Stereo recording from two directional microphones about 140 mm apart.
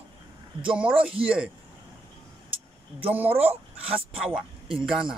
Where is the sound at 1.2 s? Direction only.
5° right (ahead or behind).